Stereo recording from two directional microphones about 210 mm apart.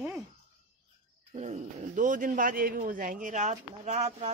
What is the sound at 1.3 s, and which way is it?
Speech, 30° right (ahead or behind).